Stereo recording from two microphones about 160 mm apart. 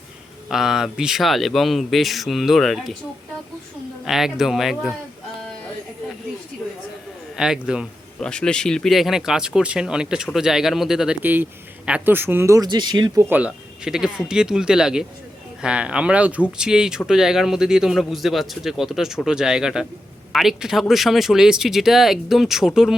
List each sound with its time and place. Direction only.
0.4 s speech: centre (ahead or behind)
4.0 s speech: centre (ahead or behind)
7.3 s speech: 5° right (ahead or behind)